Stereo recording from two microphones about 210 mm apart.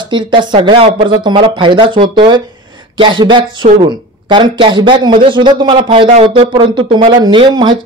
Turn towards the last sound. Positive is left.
turn(degrees=-20)  # may be behind; listen again after turning